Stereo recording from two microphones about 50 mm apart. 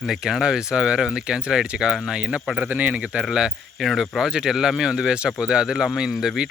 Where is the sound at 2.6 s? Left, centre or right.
Right.